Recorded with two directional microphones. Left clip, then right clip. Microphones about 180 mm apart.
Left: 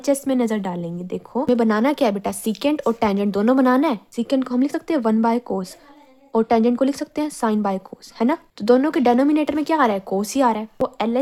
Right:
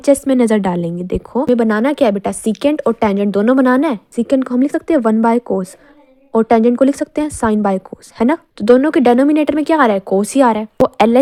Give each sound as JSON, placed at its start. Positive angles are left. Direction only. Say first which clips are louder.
{"t": 0.0, "sound": "a woman's voice", "louder": "right 8 dB", "side_deg": -30}
{"t": 10.8, "sound": "speech", "louder": "right 11 dB", "side_deg": -40}